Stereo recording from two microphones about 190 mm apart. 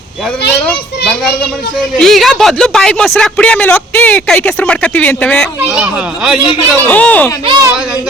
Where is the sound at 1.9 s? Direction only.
Centre (ahead or behind).